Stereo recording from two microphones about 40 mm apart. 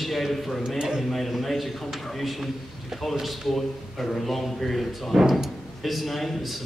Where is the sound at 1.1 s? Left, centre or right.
Centre.